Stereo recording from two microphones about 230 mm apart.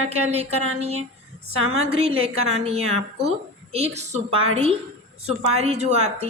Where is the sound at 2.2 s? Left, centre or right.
Right.